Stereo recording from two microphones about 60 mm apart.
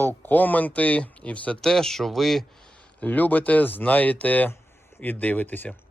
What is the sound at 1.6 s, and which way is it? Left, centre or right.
Speech, centre.